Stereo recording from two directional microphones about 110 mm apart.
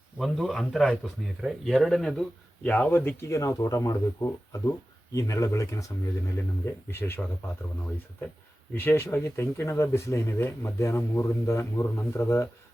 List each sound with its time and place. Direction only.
0.2 s speech: centre (ahead or behind); by 7.3 s 20° left (ahead or behind)
8.7 s speech: 20° left (ahead or behind)